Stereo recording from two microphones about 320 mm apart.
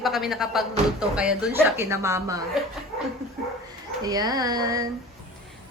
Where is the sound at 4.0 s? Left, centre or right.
Centre.